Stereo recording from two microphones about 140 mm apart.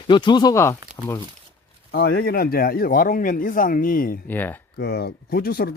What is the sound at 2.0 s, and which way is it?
Speech, 90° left.